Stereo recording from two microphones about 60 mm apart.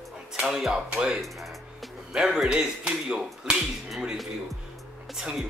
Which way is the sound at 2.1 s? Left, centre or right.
Centre.